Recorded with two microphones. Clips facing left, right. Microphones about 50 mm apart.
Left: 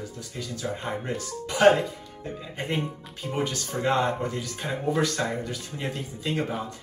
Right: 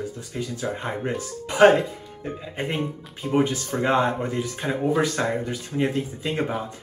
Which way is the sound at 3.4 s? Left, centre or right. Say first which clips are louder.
Right 7 dB; right.